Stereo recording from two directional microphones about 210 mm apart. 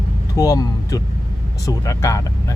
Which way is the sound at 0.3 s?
15° left (ahead or behind).